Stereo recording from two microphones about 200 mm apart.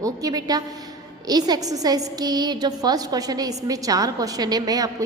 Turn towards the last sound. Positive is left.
turn(degrees=-20)  # may be behind; listen again after turning